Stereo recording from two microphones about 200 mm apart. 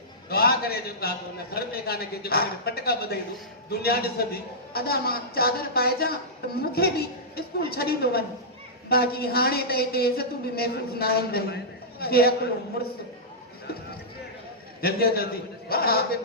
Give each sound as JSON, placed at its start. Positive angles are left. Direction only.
{"t": 0.3, "sound": "a sound", "side_deg": 50}
{"t": 1.5, "sound": "a woman's voice", "side_deg": 50}
{"t": 14.8, "sound": "a woman's voice", "side_deg": 50}